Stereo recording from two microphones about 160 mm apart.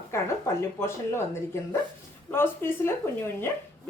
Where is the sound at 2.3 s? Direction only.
15° left (ahead or behind).